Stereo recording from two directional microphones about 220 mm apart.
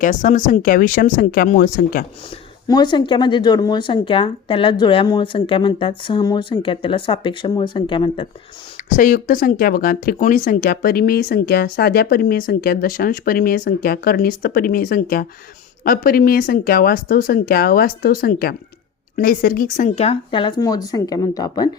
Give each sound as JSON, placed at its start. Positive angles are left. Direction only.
{"t": 0.0, "sound": "speech", "side_deg": 35}
{"t": 2.6, "sound": "speech", "side_deg": 20}
{"t": 8.9, "sound": "speech", "side_deg": 35}